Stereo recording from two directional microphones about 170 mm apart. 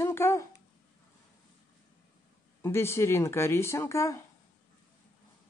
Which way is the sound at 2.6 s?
15° left (ahead or behind).